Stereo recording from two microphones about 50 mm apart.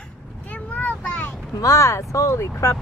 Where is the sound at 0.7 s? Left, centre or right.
Left.